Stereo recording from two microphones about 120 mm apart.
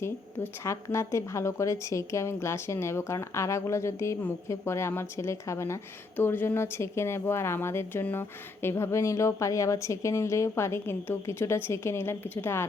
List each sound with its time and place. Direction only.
0.0 s a woman's voice: 20° left (ahead or behind)